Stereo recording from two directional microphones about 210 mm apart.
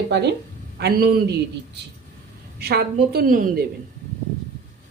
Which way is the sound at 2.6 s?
50° right (ahead or behind).